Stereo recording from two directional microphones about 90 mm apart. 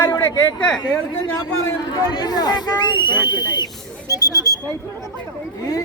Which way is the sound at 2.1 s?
50° left (ahead or behind).